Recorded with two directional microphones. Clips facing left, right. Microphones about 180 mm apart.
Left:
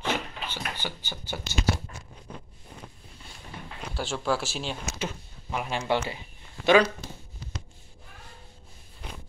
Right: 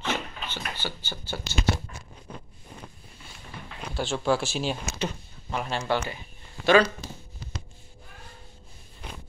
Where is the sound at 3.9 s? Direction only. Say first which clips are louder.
Right 3 dB; 5° left (ahead or behind).